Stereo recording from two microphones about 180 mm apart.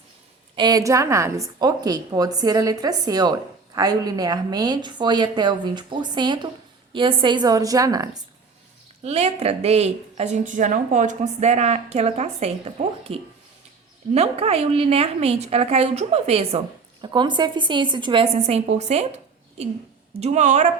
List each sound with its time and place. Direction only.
0.5 s a woman's voice: 25° right (ahead or behind)
9.0 s a woman's voice: 35° right (ahead or behind)
20.1 s a woman's voice: 40° right (ahead or behind)